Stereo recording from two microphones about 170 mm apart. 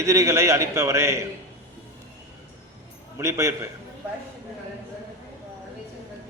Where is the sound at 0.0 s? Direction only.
15° right (ahead or behind).